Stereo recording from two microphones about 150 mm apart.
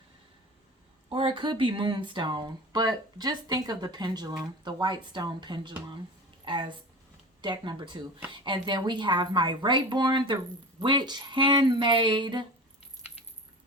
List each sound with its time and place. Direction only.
1.1 s speech: 35° right (ahead or behind)